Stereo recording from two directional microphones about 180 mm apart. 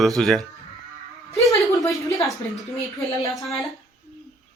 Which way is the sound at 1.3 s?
15° left (ahead or behind).